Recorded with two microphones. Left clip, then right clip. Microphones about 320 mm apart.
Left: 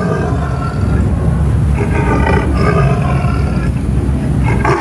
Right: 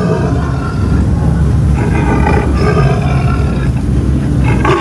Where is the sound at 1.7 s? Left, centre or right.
Centre.